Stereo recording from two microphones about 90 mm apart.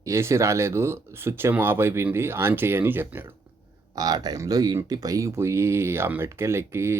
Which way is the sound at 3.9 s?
45° right (ahead or behind).